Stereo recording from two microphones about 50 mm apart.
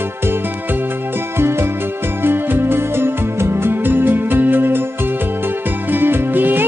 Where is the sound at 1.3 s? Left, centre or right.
Right.